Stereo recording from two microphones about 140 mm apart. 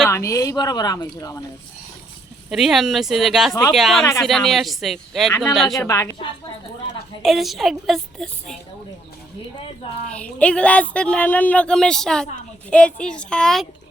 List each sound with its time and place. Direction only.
0.1 s speech: 25° left (ahead or behind)
2.5 s a woman's voice: centre (ahead or behind)
5.8 s speech: 20° left (ahead or behind)
7.2 s a woman's voice: centre (ahead or behind)
10.3 s speech: 10° left (ahead or behind)